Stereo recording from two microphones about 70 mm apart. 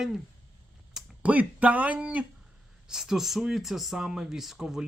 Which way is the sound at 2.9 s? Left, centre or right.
Centre.